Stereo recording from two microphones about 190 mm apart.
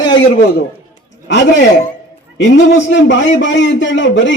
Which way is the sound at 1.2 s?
65° left (ahead or behind).